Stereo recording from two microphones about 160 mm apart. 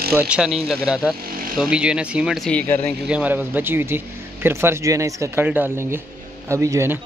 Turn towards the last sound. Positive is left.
turn(degrees=-20)  # may be behind; listen again after turning